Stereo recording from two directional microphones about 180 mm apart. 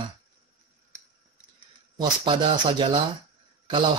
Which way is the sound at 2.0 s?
25° right (ahead or behind).